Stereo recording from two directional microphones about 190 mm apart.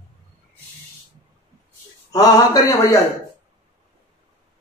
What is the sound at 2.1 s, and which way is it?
Speech, 20° left (ahead or behind).